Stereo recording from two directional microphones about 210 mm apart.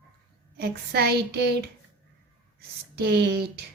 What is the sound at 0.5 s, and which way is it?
A woman's voice, 50° right (ahead or behind).